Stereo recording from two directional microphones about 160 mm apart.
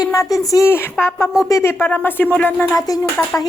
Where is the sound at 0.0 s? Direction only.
20° left (ahead or behind).